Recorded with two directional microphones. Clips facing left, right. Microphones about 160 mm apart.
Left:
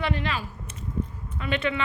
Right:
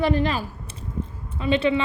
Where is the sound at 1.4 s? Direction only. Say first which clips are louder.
Right 7 dB; 30° right (ahead or behind).